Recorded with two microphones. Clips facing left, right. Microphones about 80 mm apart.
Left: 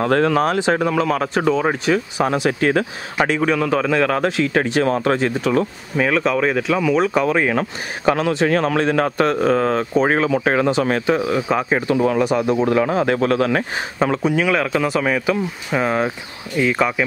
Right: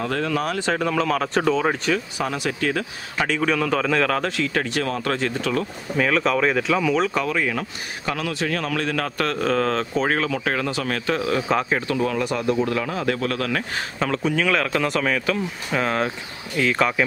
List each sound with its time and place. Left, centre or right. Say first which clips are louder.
0.0 s speech: left 8 dB; left
0.6 s speech: left 4 dB; centre
2.1 s speech: left 7 dB; left
3.4 s speech: left 3 dB; centre
7.4 s speech: left 6 dB; left
8.2 s speech: left 8 dB; left
11.1 s speech: left 3 dB; centre
11.7 s speech: left 5 dB; left
12.8 s speech: left 6 dB; left; by 17.0 s centre